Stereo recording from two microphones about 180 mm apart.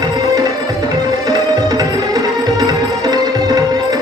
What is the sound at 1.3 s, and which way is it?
Music, 20° right (ahead or behind).